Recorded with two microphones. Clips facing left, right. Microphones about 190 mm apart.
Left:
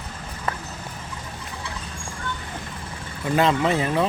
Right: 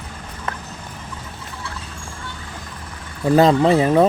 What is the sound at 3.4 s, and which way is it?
Speech, 35° right (ahead or behind).